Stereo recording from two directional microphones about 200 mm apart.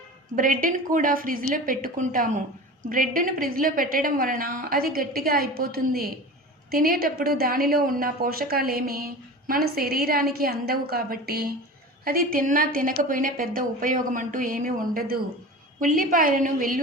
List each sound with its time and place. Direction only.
0.3 s speech: 45° right (ahead or behind)